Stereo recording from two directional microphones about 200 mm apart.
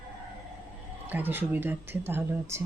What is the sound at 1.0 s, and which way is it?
Speech, 10° right (ahead or behind).